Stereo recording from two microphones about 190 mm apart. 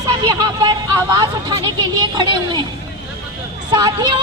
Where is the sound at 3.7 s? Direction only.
25° right (ahead or behind).